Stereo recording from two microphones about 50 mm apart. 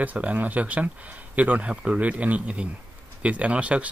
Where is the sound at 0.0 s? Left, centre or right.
Right.